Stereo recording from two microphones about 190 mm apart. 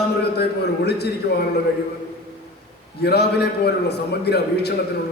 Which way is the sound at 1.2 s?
60° left (ahead or behind).